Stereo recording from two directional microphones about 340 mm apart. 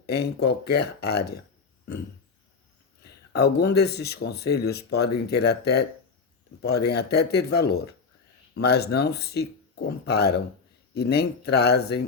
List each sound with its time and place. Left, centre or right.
0.0 s speech: left
3.0 s speech: left